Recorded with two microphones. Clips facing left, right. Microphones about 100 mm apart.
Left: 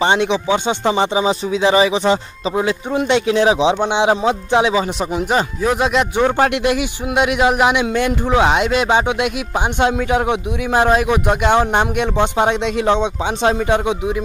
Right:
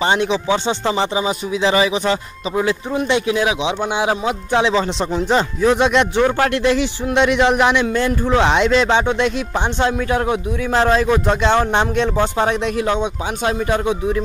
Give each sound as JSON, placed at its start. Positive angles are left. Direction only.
{"t": 0.0, "sound": "speech", "side_deg": 20}
{"t": 4.6, "sound": "a man's voice", "side_deg": 15}
{"t": 6.1, "sound": "a man's voice", "side_deg": 20}